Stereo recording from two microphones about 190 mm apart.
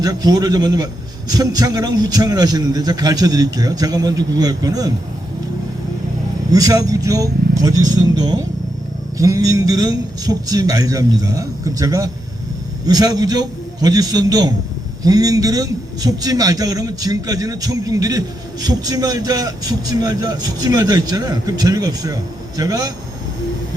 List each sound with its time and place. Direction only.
0.0 s speech: 20° right (ahead or behind)
6.5 s a man's voice: 20° right (ahead or behind)